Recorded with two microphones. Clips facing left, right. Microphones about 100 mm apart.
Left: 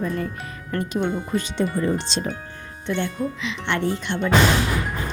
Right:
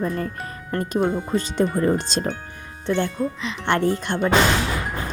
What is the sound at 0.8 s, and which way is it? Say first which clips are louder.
Speech: right 2 dB; 35° right (ahead or behind).